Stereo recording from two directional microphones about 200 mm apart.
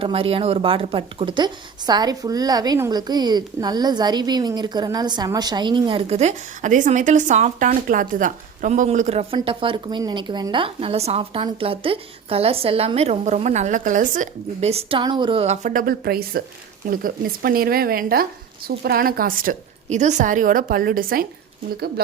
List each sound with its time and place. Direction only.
0.0 s a woman's voice: 30° right (ahead or behind); by 21.2 s 45° right (ahead or behind)